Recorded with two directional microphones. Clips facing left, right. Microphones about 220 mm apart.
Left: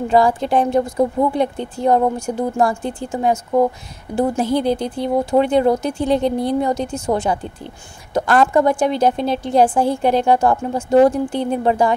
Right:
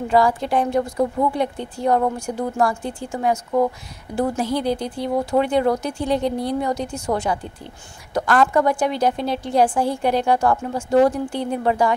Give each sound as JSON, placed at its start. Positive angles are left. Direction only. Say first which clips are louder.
{"t": 0.1, "sound": "a woman's voice", "louder": "left 3 dB", "side_deg": 25}